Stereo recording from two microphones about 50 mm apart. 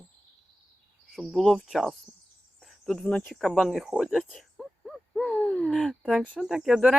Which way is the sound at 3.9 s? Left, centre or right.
Centre.